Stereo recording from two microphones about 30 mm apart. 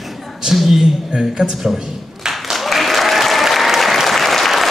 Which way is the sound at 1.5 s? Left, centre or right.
Centre.